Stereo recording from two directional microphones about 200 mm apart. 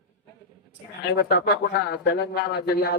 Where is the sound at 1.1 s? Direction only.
50° left (ahead or behind).